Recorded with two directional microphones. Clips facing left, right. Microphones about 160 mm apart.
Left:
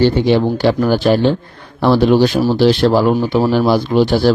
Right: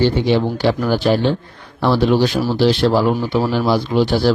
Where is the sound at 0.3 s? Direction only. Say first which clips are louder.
Left 3 dB; 50° left (ahead or behind).